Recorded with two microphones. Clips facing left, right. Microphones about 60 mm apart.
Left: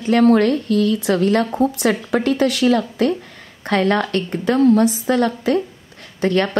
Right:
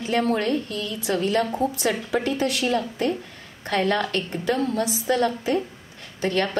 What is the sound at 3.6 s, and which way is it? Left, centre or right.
A woman's voice, left.